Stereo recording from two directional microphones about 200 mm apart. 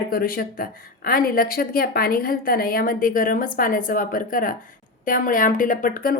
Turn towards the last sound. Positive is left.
turn(degrees=45)  # may be behind; listen again after turning